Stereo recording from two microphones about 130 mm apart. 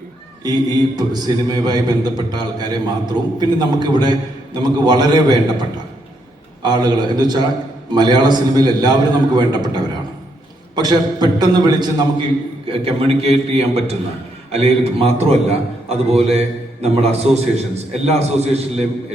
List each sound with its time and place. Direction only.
0.4 s a man's voice: 30° right (ahead or behind)
12.8 s a man's voice: 50° right (ahead or behind)